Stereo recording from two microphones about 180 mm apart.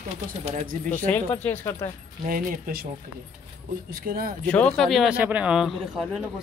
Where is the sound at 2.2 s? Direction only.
50° right (ahead or behind).